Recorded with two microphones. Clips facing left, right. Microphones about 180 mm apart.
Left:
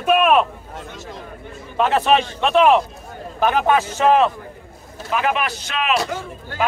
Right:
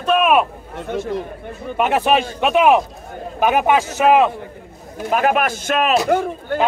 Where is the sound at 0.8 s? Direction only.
60° right (ahead or behind).